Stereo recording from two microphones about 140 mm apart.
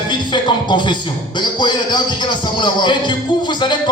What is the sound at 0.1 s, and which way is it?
Speech, 35° left (ahead or behind).